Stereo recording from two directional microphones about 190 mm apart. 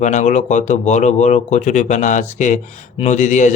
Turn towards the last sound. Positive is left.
turn(degrees=40)  # may be behind; listen again after turning